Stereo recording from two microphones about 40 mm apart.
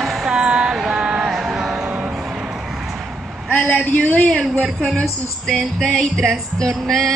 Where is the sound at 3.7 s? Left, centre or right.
Left.